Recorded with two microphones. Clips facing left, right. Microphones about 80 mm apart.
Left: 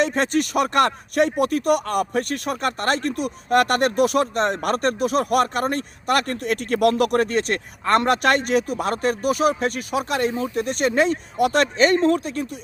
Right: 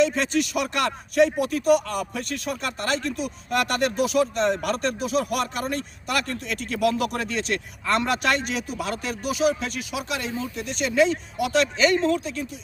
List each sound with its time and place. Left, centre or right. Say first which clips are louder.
0.0 s speech: left 1 dB; left